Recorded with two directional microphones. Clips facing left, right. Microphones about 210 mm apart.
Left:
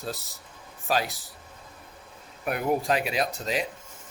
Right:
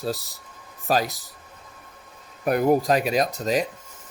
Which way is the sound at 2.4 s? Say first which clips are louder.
Right 6 dB; 40° right (ahead or behind).